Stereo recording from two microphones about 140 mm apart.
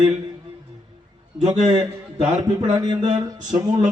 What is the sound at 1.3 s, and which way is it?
Speech, 50° right (ahead or behind).